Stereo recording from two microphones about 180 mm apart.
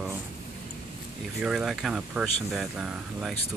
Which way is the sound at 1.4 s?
Centre (ahead or behind).